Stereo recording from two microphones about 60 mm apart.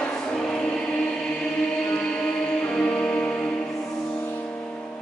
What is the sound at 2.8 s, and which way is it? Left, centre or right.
Music, centre.